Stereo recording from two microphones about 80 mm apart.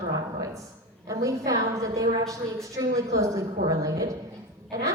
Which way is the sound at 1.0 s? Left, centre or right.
Right.